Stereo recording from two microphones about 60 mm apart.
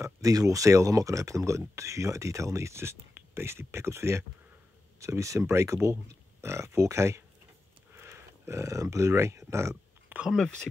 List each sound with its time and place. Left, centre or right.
0.0 s speech: right
5.0 s speech: right
7.9 s a sound: right
10.3 s speech: centre